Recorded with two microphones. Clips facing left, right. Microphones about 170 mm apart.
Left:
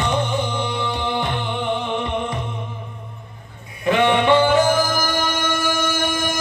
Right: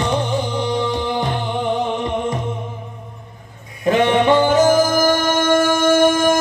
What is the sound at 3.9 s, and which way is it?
Music, 40° right (ahead or behind).